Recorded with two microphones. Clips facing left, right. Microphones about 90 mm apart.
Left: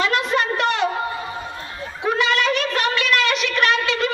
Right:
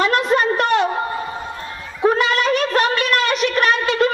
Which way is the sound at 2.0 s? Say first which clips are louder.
Right 3 dB; 45° right (ahead or behind).